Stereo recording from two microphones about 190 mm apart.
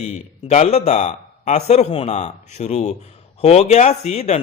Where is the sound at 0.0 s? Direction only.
35° left (ahead or behind).